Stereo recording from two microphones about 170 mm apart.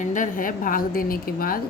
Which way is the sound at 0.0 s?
50° left (ahead or behind).